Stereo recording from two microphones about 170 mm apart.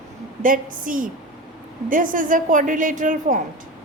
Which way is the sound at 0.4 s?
50° right (ahead or behind).